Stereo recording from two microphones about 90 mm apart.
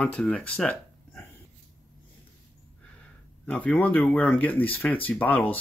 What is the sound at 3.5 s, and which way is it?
Speech, 15° left (ahead or behind).